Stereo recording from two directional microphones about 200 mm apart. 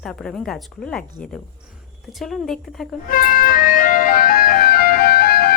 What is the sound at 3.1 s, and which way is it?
Music, 45° left (ahead or behind).